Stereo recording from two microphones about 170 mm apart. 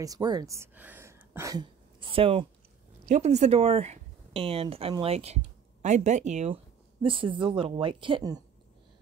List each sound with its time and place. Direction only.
0.0 s speech: 20° right (ahead or behind)
3.1 s speech: 45° right (ahead or behind); by 8.4 s 25° right (ahead or behind)